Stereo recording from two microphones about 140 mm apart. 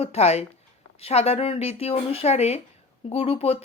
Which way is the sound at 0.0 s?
50° left (ahead or behind).